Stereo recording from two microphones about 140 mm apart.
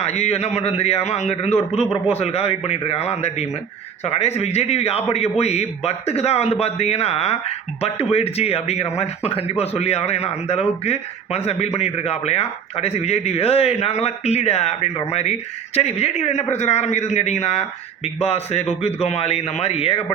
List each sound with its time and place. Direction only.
0.0 s a man's voice: 50° left (ahead or behind)